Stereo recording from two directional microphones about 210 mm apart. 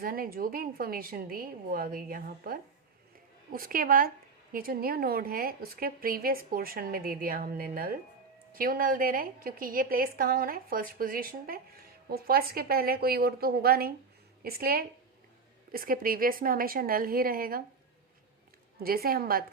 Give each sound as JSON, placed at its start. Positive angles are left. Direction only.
{"t": 0.0, "sound": "a woman's voice", "side_deg": -45}
{"t": 18.8, "sound": "a woman's voice", "side_deg": -45}